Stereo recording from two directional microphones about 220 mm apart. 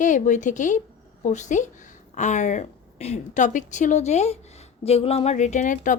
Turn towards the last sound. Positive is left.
turn(degrees=35)  # may be behind; listen again after turning